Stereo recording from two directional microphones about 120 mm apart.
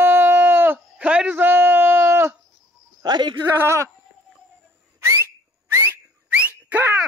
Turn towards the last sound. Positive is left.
turn(degrees=-15)  # may be behind; listen again after turning